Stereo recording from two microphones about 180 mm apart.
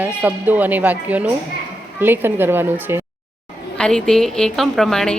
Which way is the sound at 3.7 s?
5° left (ahead or behind).